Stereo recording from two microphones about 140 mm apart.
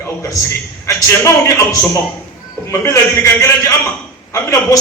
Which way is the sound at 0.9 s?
20° left (ahead or behind).